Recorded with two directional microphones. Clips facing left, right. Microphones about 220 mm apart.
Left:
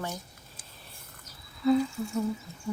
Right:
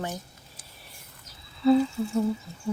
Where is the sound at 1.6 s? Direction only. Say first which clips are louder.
Right 4 dB; 30° right (ahead or behind).